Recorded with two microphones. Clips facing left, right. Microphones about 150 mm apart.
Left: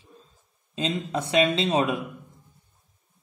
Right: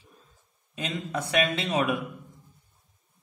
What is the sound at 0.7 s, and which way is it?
Speech, 25° left (ahead or behind).